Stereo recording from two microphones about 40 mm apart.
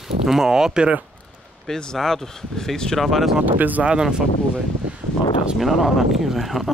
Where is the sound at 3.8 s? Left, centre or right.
Right.